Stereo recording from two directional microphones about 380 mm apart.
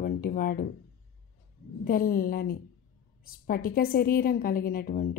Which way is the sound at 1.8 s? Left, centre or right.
Left.